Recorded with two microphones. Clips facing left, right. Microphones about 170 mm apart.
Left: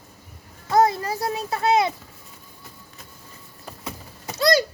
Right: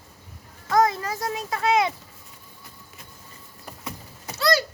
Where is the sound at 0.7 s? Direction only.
35° left (ahead or behind).